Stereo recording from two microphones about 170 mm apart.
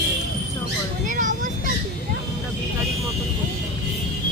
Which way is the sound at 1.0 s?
50° right (ahead or behind).